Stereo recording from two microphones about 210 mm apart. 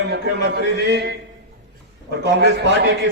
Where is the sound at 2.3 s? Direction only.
55° right (ahead or behind).